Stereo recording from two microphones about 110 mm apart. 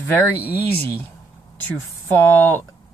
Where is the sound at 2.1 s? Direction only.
20° left (ahead or behind).